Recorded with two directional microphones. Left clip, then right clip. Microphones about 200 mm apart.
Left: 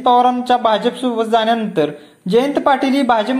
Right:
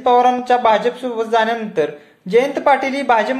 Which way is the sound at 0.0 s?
20° left (ahead or behind).